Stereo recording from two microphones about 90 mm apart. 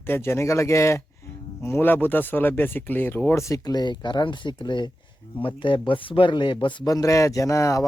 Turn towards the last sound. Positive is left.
turn(degrees=35)  # may be behind; listen again after turning